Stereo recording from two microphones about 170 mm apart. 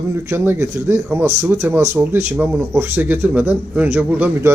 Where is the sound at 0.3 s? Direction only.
15° right (ahead or behind).